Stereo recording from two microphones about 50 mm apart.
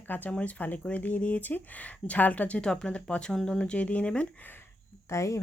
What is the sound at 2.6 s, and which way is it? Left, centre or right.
Speech, centre.